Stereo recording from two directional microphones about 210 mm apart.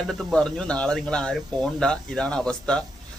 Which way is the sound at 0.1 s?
Centre (ahead or behind).